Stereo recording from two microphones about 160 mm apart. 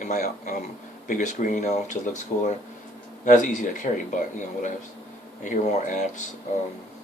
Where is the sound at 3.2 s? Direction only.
50° left (ahead or behind).